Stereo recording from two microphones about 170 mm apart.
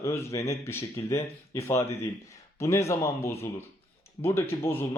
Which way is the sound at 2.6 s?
15° left (ahead or behind).